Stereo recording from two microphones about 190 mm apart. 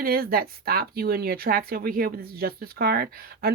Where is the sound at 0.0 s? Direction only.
50° right (ahead or behind).